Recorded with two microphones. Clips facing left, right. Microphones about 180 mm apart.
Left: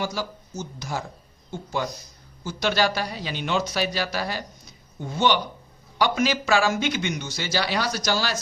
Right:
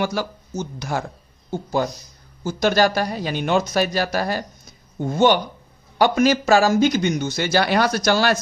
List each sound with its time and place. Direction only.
0.0 s speech: 65° right (ahead or behind)
1.5 s speech: 40° right (ahead or behind); by 8.4 s 60° right (ahead or behind)